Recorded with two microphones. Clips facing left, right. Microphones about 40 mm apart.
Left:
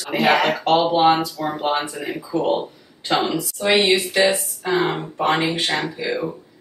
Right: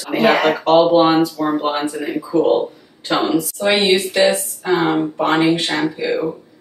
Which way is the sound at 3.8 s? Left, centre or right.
Centre.